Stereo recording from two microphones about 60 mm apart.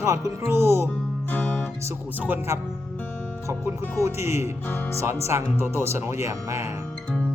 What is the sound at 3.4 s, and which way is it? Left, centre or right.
Music, right.